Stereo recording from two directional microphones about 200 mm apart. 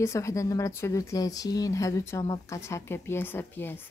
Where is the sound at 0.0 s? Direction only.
15° left (ahead or behind).